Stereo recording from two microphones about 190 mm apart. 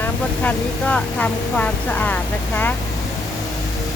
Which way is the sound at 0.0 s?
10° left (ahead or behind).